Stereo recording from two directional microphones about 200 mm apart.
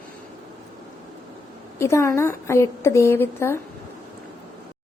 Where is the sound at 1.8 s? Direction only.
15° left (ahead or behind).